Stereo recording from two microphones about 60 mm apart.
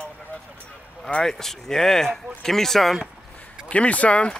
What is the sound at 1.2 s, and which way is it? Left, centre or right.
Speech, centre.